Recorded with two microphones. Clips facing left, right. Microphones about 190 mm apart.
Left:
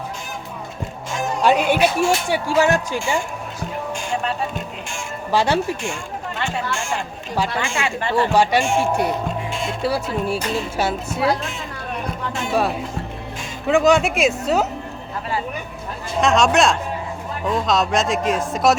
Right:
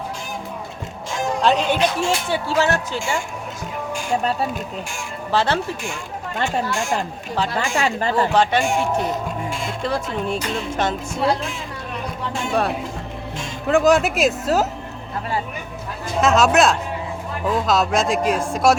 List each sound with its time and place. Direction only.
1.4 s music: 10° left (ahead or behind)
4.2 s speech: 40° right (ahead or behind)
5.3 s music: 10° left (ahead or behind)
6.4 s speech: 40° right (ahead or behind)
8.3 s music: 10° left (ahead or behind)
12.5 s speech: 5° left (ahead or behind)
16.2 s speech: centre (ahead or behind)